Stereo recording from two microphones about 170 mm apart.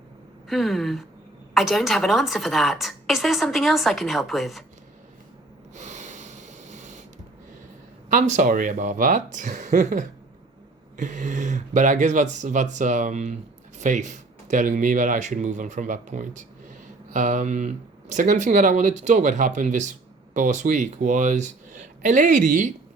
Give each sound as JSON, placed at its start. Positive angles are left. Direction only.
{"t": 0.4, "sound": "a woman's voice", "side_deg": 0}
{"t": 5.7, "sound": "snort", "side_deg": -45}
{"t": 8.1, "sound": "speech", "side_deg": -45}